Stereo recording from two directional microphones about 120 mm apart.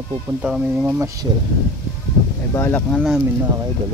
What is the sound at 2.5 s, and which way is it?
Speech, 15° left (ahead or behind).